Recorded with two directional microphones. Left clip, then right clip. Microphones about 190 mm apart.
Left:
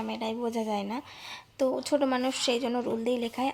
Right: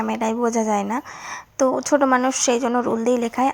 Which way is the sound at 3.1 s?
50° right (ahead or behind).